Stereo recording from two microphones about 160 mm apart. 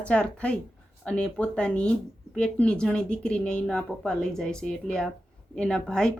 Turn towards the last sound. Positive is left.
turn(degrees=5)  # may be behind; listen again after turning